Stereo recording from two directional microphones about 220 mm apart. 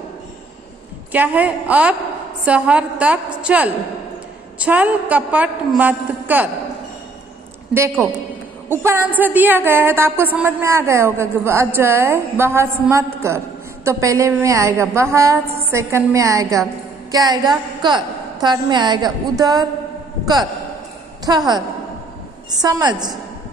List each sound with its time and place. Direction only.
1.1 s a woman's voice: 5° right (ahead or behind)
8.6 s a woman's voice: 10° right (ahead or behind)
21.3 s a woman's voice: 20° right (ahead or behind)